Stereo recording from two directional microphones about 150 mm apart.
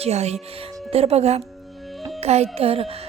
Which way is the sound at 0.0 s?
45° right (ahead or behind).